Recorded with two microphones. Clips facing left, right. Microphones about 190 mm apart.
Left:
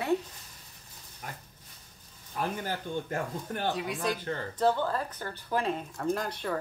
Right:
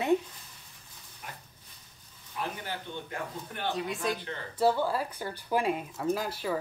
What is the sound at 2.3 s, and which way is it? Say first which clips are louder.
Speech: left 3 dB; 45° left (ahead or behind).